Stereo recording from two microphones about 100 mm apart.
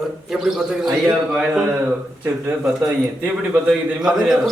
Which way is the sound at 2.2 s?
20° right (ahead or behind).